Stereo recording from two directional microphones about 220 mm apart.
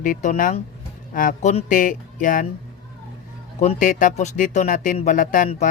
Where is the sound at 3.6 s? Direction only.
35° left (ahead or behind).